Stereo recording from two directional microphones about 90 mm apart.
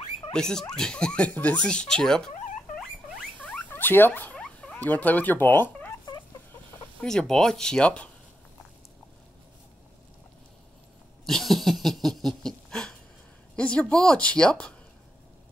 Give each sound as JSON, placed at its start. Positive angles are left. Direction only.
{"t": 0.3, "sound": "speech", "side_deg": 5}
{"t": 3.3, "sound": "rodents", "side_deg": 15}
{"t": 7.0, "sound": "speech", "side_deg": 5}
{"t": 11.2, "sound": "a sound", "side_deg": 5}
{"t": 13.6, "sound": "a woman's voice", "side_deg": 10}